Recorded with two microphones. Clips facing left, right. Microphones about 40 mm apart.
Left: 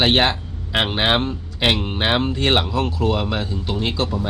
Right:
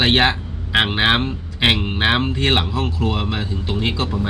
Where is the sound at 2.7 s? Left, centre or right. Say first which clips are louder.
Left 2 dB; centre.